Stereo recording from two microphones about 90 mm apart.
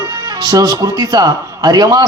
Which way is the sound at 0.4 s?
45° right (ahead or behind).